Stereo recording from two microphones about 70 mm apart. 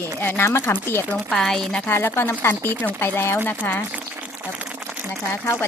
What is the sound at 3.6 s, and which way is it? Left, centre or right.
Speech, left.